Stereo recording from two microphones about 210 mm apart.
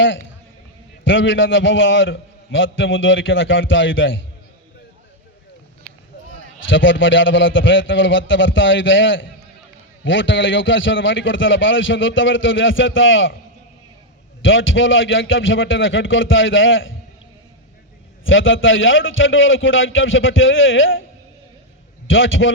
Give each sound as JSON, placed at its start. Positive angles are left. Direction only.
{"t": 0.0, "sound": "a man's voice", "side_deg": 65}
{"t": 6.7, "sound": "a man's voice", "side_deg": 65}
{"t": 14.4, "sound": "a man's voice", "side_deg": 65}
{"t": 18.3, "sound": "a man's voice", "side_deg": 65}
{"t": 22.0, "sound": "a man's voice", "side_deg": 65}